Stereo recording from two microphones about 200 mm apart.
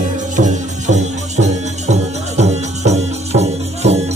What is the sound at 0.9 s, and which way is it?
Music, 35° right (ahead or behind).